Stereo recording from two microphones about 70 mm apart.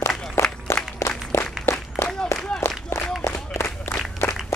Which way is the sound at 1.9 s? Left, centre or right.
Left.